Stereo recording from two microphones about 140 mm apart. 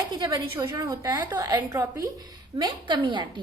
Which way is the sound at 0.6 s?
20° right (ahead or behind).